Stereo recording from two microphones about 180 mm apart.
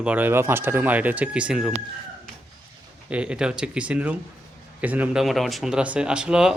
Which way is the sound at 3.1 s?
5° right (ahead or behind).